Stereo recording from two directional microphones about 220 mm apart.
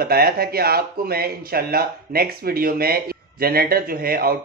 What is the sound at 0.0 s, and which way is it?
Speech, 45° right (ahead or behind).